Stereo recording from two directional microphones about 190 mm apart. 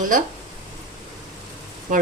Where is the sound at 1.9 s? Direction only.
45° right (ahead or behind).